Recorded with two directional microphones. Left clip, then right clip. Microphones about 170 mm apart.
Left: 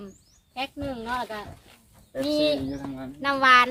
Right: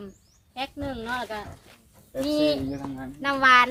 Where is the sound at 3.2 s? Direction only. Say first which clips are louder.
Even; 20° left (ahead or behind).